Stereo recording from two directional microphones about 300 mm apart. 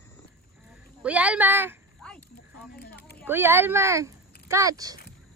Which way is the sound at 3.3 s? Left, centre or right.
Centre.